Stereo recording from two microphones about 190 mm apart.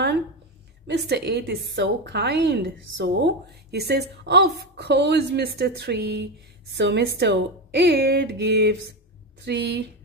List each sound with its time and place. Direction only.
0.8 s a woman's voice: 60° right (ahead or behind)